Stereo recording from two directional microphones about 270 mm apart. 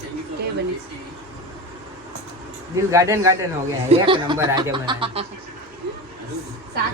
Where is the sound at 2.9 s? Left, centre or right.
Centre.